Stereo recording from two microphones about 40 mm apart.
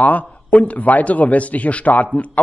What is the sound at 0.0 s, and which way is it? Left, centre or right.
A man's voice, left.